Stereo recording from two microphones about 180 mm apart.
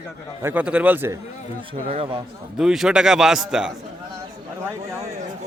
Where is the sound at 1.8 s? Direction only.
30° right (ahead or behind).